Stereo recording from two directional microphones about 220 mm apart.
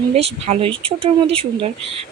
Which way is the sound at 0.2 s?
30° right (ahead or behind).